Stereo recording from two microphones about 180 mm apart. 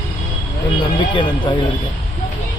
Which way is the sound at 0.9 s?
25° left (ahead or behind).